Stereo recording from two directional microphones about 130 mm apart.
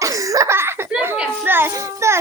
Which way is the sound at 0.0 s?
25° right (ahead or behind).